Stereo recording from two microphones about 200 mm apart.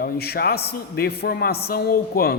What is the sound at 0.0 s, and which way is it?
A man's voice, 50° left (ahead or behind).